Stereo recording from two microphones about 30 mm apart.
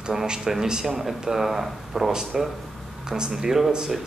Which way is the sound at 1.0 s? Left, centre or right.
Centre.